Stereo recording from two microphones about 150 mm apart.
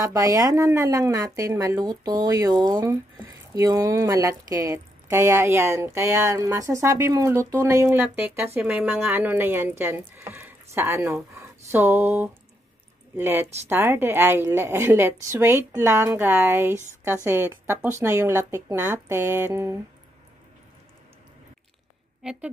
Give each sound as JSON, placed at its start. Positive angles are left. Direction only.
{"t": 0.0, "sound": "a woman's voice", "side_deg": -20}
{"t": 11.3, "sound": "a sound", "side_deg": -15}
{"t": 13.2, "sound": "a woman's voice", "side_deg": -15}
{"t": 22.2, "sound": "a woman's voice", "side_deg": -5}